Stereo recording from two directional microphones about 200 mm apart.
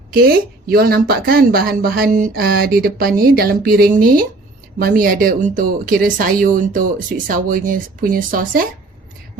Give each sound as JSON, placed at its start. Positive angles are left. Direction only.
{"t": 0.1, "sound": "a woman's voice", "side_deg": -50}